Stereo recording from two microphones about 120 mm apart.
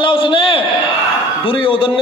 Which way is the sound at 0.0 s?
45° left (ahead or behind).